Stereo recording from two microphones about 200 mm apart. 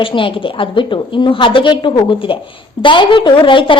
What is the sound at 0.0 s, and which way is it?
A woman's voice, 25° left (ahead or behind).